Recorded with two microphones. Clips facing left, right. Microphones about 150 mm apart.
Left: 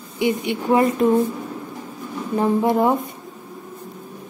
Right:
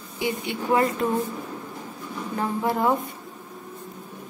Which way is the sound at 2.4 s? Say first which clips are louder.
Left 7 dB; 20° left (ahead or behind).